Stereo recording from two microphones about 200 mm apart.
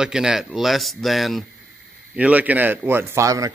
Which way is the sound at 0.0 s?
5° right (ahead or behind).